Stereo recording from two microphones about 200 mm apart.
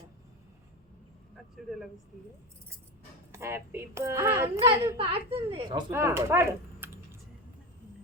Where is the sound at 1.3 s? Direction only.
Centre (ahead or behind).